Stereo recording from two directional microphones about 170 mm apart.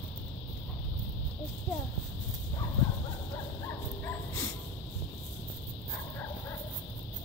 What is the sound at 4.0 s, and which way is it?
Dog, 15° left (ahead or behind).